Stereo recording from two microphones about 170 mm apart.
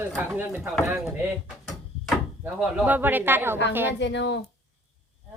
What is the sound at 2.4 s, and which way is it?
Speech, 10° right (ahead or behind).